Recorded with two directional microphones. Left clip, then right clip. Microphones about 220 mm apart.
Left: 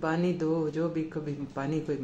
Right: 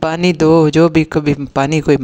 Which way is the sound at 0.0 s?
50° right (ahead or behind).